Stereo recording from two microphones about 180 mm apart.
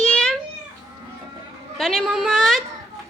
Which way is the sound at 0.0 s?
5° left (ahead or behind).